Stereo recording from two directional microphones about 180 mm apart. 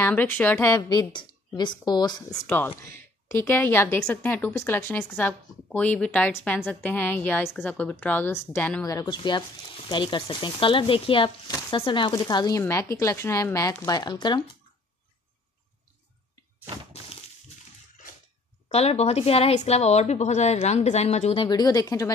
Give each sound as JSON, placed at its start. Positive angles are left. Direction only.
{"t": 0.0, "sound": "speech", "side_deg": 10}
{"t": 2.4, "sound": "a woman's voice", "side_deg": 5}
{"t": 18.7, "sound": "a woman's voice", "side_deg": 35}
{"t": 21.5, "sound": "speech", "side_deg": 20}